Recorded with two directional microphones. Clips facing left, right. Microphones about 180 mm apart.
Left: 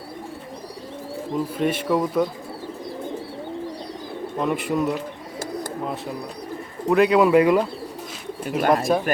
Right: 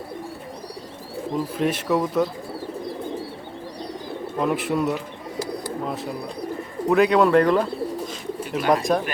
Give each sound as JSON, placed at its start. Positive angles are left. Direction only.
{"t": 1.5, "sound": "speech", "side_deg": 0}
{"t": 4.4, "sound": "speech", "side_deg": 0}
{"t": 6.8, "sound": "speech", "side_deg": 0}
{"t": 8.4, "sound": "speech", "side_deg": 50}
{"t": 8.7, "sound": "speech", "side_deg": 0}